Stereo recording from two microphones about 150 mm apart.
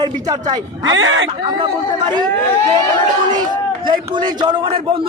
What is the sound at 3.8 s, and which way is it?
A man's voice, 30° right (ahead or behind).